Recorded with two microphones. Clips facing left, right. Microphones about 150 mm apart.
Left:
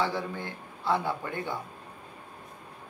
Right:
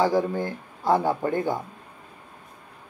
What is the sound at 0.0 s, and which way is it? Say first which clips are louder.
Speech: right 8 dB; 40° right (ahead or behind).